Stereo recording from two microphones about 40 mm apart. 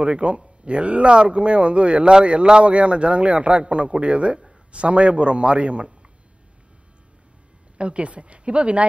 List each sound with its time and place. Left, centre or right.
0.0 s a man's voice: right
7.7 s speech: right